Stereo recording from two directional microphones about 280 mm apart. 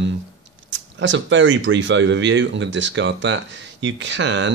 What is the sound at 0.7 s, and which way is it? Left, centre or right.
Speech, right.